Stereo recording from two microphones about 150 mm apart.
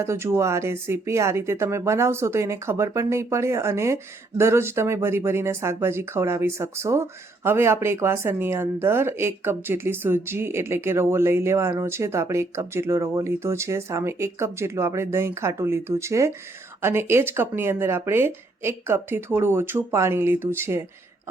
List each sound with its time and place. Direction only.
0.0 s speech: 20° right (ahead or behind)